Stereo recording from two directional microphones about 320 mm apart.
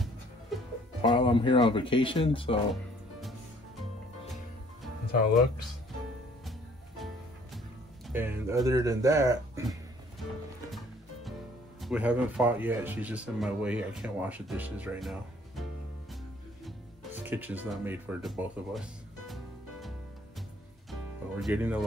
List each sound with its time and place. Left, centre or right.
1.0 s speech: centre
2.7 s music: centre
8.1 s speech: centre
11.8 s speech: centre
16.6 s music: centre
20.9 s music: centre